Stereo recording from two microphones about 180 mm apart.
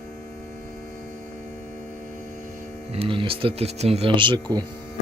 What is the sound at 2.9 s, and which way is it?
Speech, 30° right (ahead or behind).